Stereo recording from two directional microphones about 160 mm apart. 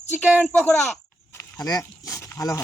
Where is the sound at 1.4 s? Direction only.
20° left (ahead or behind).